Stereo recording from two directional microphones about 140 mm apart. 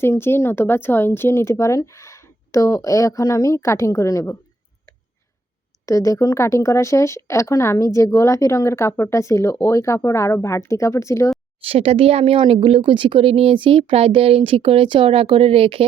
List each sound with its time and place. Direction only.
0.0 s speech: 15° left (ahead or behind)
5.8 s speech: 25° left (ahead or behind)
11.6 s speech: 45° right (ahead or behind)